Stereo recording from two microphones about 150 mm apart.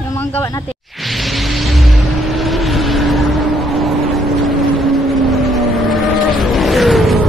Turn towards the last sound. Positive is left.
turn(degrees=0)  # may be behind; listen again after turning